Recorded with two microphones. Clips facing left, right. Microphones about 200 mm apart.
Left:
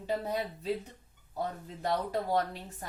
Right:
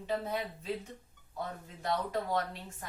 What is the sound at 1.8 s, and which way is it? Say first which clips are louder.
Speech: left 2 dB; 35° left (ahead or behind).